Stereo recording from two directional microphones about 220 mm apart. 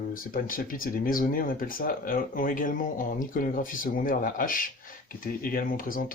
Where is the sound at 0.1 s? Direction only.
40° left (ahead or behind).